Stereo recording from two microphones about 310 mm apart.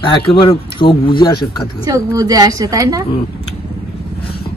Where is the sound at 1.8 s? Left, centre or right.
Centre.